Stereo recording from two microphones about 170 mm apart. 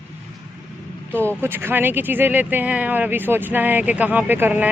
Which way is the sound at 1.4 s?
15° right (ahead or behind).